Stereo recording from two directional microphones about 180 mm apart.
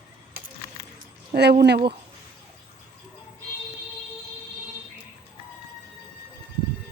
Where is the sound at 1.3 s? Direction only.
60° right (ahead or behind).